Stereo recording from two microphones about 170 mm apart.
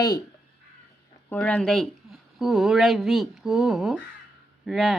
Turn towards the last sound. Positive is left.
turn(degrees=0)  # may be behind; listen again after turning